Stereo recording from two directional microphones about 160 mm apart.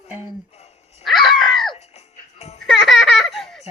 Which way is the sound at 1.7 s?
40° left (ahead or behind).